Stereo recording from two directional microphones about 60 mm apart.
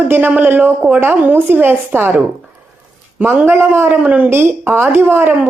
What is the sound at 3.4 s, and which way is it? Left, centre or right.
Speech, right.